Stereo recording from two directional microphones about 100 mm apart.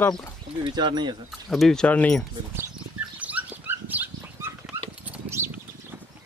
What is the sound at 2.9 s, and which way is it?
Dog, 15° right (ahead or behind).